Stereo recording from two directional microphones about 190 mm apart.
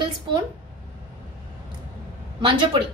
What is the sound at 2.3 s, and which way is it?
Speech, 25° right (ahead or behind).